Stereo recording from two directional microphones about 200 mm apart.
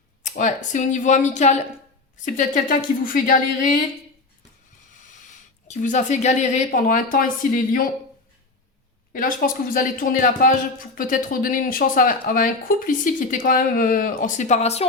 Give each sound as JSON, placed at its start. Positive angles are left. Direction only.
{"t": 0.2, "sound": "a woman's voice", "side_deg": 40}
{"t": 5.6, "sound": "a woman's voice", "side_deg": 35}
{"t": 9.1, "sound": "speech", "side_deg": 45}